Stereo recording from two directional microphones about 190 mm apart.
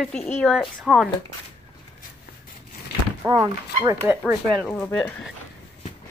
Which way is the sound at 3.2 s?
20° right (ahead or behind).